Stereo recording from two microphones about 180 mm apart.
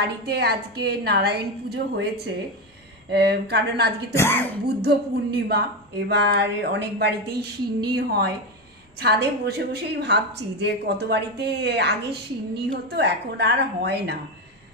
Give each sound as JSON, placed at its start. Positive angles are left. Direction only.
{"t": 0.3, "sound": "speech", "side_deg": -65}
{"t": 3.1, "sound": "speech", "side_deg": -65}
{"t": 4.1, "sound": "speech", "side_deg": 15}
{"t": 4.8, "sound": "a woman's voice", "side_deg": -65}